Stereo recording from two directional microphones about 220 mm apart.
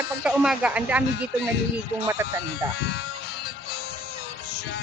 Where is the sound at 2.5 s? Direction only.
50° left (ahead or behind).